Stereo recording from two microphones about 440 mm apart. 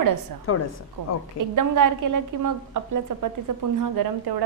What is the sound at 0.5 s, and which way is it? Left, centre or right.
Speech, left.